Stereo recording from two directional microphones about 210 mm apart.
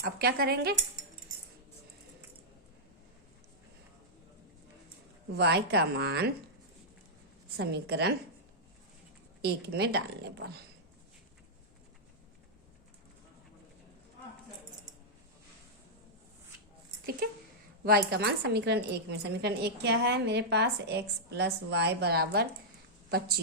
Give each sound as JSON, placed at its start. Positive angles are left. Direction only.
{"t": 0.0, "sound": "a woman's voice", "side_deg": -45}
{"t": 5.3, "sound": "a woman's voice", "side_deg": -50}
{"t": 7.5, "sound": "a woman's voice", "side_deg": -50}
{"t": 9.4, "sound": "a woman's voice", "side_deg": -50}
{"t": 17.2, "sound": "a sound", "side_deg": -45}
{"t": 17.8, "sound": "a woman's voice", "side_deg": -45}